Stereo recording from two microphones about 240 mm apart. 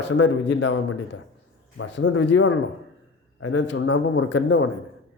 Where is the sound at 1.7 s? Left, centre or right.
Left.